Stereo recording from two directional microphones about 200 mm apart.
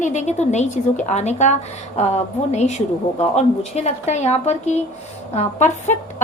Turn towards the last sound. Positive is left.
turn(degrees=35)  # may be behind; listen again after turning